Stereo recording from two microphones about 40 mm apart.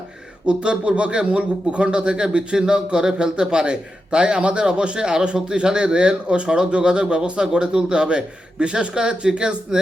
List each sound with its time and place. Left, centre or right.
0.4 s speech: right